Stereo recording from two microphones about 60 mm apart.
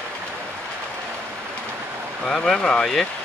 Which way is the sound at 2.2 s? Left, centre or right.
Centre.